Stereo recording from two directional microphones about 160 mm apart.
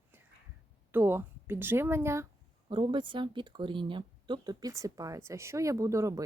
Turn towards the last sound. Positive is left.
turn(degrees=-20)  # may be behind; listen again after turning